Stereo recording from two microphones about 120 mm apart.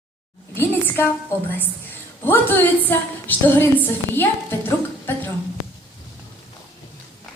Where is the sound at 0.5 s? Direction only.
20° left (ahead or behind).